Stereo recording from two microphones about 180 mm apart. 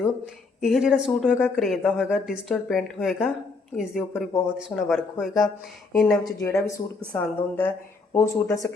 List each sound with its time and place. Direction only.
0.6 s speech: centre (ahead or behind)
6.4 s speech: 15° left (ahead or behind)